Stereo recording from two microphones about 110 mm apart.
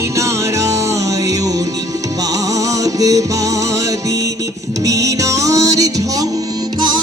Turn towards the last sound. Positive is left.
turn(degrees=-30)  # may be behind; listen again after turning